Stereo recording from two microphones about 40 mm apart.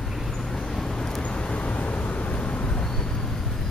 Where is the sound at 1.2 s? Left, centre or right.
Left.